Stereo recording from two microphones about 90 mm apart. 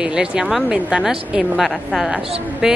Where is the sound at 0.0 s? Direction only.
10° right (ahead or behind).